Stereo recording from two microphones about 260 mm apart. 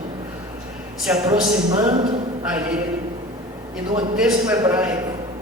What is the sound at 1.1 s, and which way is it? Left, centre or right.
Speech, centre.